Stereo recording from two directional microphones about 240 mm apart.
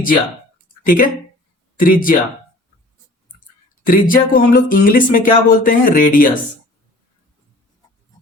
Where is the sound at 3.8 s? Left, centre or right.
Left.